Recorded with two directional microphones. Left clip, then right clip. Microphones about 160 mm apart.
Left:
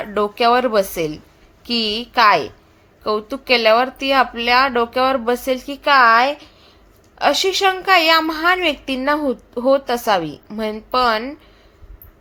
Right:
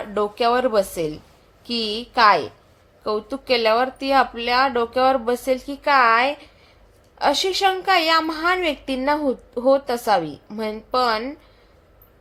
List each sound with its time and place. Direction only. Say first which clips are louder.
0.0 s a woman's voice: left 4 dB; 15° left (ahead or behind)